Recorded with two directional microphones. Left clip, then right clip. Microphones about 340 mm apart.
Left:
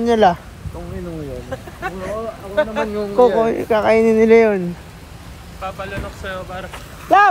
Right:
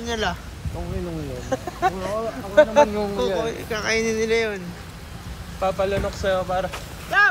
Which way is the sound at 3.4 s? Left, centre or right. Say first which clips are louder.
Left 10 dB; centre.